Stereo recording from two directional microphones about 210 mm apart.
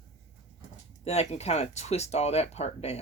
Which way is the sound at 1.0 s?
30° left (ahead or behind).